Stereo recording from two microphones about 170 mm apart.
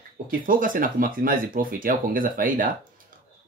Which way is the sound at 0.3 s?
55° right (ahead or behind).